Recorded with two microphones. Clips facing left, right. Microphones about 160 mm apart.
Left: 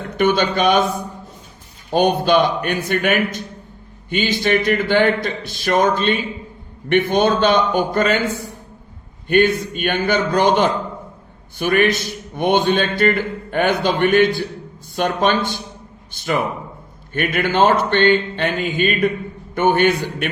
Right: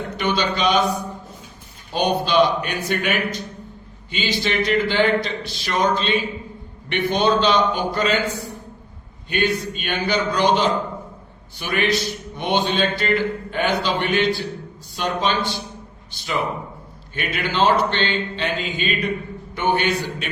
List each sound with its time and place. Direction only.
0.2 s a man's voice: 50° left (ahead or behind)